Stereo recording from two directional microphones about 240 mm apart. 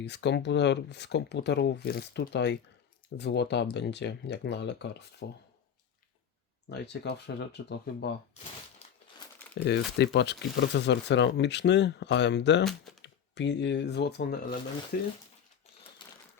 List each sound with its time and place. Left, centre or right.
0.0 s speech: left
6.7 s speech: left
9.6 s speech: left
16.0 s typewriter: centre